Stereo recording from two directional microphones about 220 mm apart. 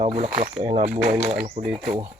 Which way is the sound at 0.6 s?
30° right (ahead or behind).